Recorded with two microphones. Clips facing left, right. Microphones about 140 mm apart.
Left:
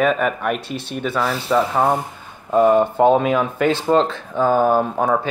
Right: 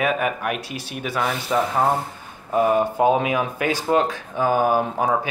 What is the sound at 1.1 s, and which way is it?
Speech, 35° left (ahead or behind).